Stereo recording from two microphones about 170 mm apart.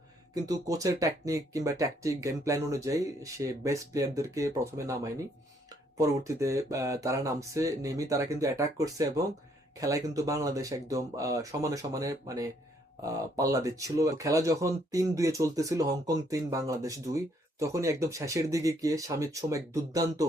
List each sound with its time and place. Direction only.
0.4 s speech: 20° right (ahead or behind)